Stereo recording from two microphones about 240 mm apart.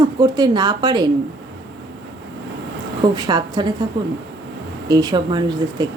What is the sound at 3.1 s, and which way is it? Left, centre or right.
A woman's voice, centre.